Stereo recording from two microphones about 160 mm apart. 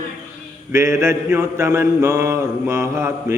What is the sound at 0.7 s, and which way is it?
Mantra, 15° right (ahead or behind).